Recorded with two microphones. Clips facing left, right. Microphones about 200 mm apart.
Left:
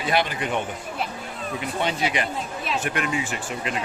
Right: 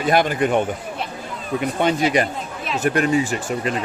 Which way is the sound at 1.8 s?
45° right (ahead or behind).